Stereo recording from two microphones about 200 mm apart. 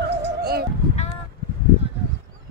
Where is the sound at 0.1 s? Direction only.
55° right (ahead or behind).